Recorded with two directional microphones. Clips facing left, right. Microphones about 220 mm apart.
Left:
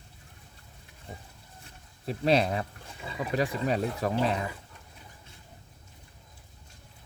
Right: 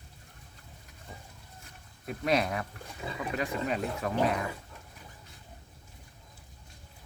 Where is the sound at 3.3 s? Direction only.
35° left (ahead or behind).